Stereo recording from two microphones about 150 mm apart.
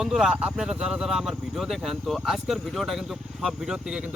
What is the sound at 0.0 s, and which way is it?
Speech, 5° right (ahead or behind).